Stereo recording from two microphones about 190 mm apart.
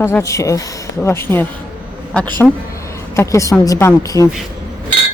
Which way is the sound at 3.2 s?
15° left (ahead or behind).